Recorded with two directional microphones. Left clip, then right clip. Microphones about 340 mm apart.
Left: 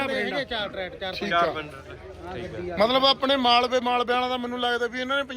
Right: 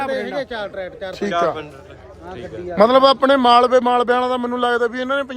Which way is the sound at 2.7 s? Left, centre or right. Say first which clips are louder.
Right 9 dB; right.